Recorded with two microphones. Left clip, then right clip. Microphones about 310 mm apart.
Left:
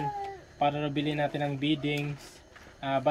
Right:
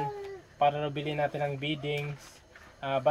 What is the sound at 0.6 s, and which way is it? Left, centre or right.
Speech, centre.